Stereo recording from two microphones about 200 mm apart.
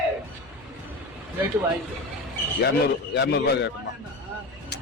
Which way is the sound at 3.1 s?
55° left (ahead or behind).